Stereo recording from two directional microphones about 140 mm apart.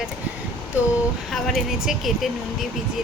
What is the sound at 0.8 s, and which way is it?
Speech, 10° right (ahead or behind).